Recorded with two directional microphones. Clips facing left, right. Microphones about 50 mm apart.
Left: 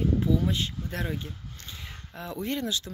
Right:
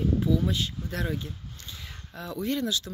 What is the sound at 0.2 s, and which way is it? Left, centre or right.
Speech, left.